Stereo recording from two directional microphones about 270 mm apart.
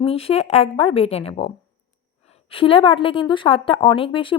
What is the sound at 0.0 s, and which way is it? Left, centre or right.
A woman's voice, left.